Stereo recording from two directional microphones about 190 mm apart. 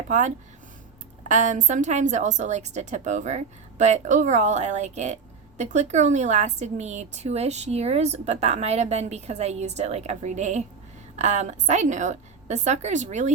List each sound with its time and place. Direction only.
0.1 s a woman's voice: 40° right (ahead or behind)